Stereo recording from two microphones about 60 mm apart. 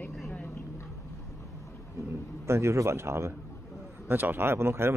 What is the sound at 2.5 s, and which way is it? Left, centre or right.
Speech, right.